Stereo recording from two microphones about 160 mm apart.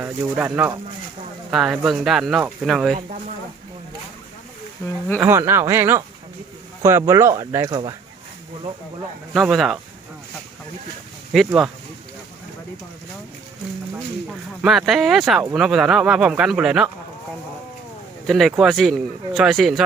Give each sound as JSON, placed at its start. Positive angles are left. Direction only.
{"t": 0.0, "sound": "speech", "side_deg": -10}
{"t": 2.9, "sound": "speech", "side_deg": -50}
{"t": 5.2, "sound": "speech", "side_deg": -15}
{"t": 9.3, "sound": "speech", "side_deg": 0}
{"t": 11.3, "sound": "speech", "side_deg": -5}
{"t": 14.6, "sound": "speech", "side_deg": 0}
{"t": 18.3, "sound": "speech", "side_deg": 0}